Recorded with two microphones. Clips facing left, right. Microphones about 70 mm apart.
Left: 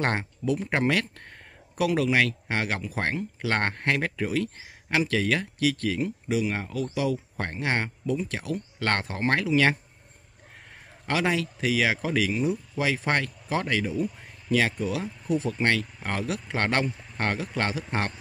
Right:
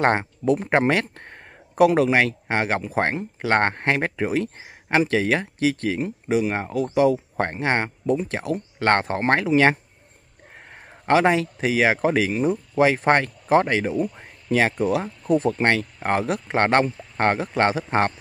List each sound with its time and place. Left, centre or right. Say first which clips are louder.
0.0 s a man's voice: right 7 dB; right
14.1 s a sound: right 3 dB; right
14.8 s speech: right 7 dB; right